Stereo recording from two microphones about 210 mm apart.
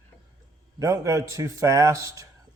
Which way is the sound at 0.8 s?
15° right (ahead or behind).